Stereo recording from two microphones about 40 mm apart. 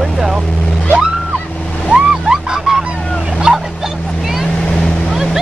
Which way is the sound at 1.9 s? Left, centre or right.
Centre.